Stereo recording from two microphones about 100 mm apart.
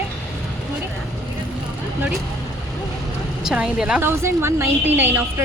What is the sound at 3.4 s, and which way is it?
Speech, 10° right (ahead or behind).